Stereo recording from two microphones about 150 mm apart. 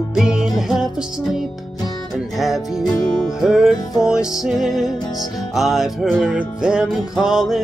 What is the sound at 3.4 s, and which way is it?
Music, 5° right (ahead or behind).